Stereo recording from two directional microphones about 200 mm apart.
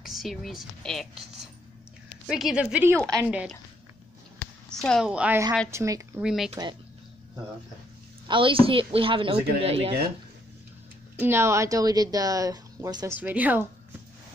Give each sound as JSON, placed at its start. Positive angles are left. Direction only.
{"t": 0.0, "sound": "speech", "side_deg": 0}
{"t": 2.2, "sound": "a woman's voice", "side_deg": 0}
{"t": 4.6, "sound": "a woman's voice", "side_deg": 0}
{"t": 6.2, "sound": "a woman's voice", "side_deg": 0}
{"t": 6.5, "sound": "speech", "side_deg": -20}
{"t": 8.3, "sound": "speech", "side_deg": -25}
{"t": 11.1, "sound": "speech", "side_deg": -10}